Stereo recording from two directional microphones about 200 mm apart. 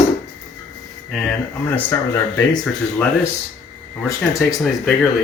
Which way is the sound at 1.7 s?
10° left (ahead or behind).